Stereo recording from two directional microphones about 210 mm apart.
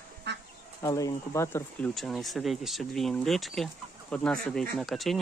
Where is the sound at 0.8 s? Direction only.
15° left (ahead or behind).